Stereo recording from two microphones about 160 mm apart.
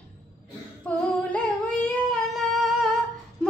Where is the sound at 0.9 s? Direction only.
10° left (ahead or behind).